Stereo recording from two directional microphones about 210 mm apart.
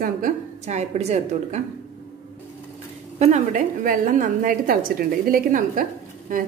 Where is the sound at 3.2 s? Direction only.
35° right (ahead or behind).